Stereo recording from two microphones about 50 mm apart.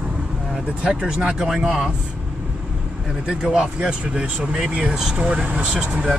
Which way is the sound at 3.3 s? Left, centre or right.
Centre.